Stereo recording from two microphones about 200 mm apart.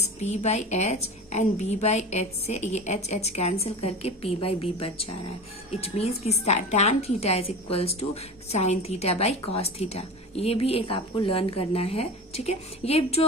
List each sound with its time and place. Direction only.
0.0 s a woman's voice: 35° left (ahead or behind)